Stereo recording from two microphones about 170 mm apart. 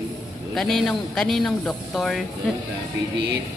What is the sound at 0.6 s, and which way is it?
Speech, centre (ahead or behind).